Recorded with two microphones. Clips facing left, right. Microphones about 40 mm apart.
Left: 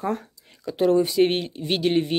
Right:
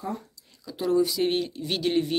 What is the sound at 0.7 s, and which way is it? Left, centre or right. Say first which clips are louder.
Speech: left 4 dB; left.